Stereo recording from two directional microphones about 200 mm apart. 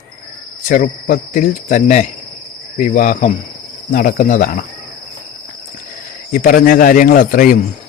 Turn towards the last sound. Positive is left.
turn(degrees=45)  # may be behind; listen again after turning